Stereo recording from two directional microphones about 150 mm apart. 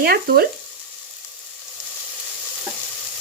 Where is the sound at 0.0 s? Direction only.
90° right.